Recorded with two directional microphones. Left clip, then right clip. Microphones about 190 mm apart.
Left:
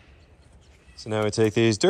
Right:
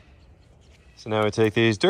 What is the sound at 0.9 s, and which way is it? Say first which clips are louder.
Speech: right 2 dB; 10° left (ahead or behind).